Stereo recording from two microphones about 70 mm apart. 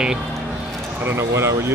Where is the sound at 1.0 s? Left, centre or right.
Right.